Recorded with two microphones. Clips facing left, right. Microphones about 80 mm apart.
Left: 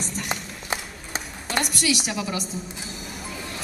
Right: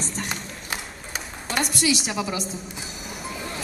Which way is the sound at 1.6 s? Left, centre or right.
Right.